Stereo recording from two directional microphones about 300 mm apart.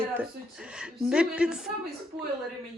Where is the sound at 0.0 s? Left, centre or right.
Centre.